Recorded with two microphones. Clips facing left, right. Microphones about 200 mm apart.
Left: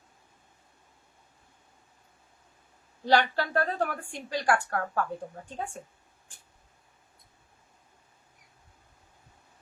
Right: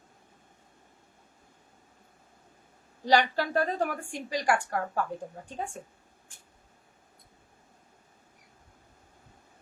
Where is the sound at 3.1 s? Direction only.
10° right (ahead or behind).